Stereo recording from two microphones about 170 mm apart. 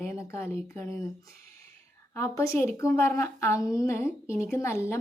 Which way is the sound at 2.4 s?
15° left (ahead or behind).